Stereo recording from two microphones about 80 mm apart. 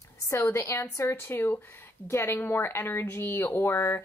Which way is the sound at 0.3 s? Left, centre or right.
Left.